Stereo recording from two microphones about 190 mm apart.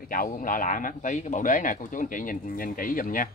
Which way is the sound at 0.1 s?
45° left (ahead or behind).